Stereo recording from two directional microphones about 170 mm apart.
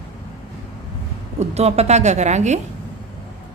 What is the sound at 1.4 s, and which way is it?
Speech, 40° right (ahead or behind).